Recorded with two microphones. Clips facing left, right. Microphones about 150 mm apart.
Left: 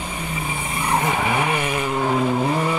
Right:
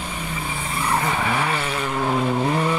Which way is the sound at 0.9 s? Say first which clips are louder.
Left 2 dB; 15° left (ahead or behind).